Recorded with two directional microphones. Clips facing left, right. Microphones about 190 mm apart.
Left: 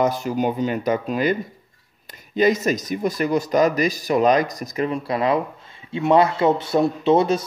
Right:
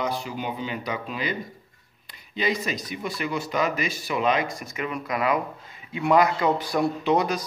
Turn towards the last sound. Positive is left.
turn(degrees=25)  # may be behind; listen again after turning